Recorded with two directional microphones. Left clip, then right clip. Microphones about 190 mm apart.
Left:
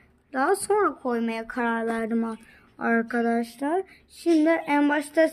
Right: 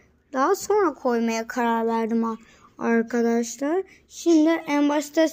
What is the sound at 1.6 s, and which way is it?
A woman's voice, 20° right (ahead or behind).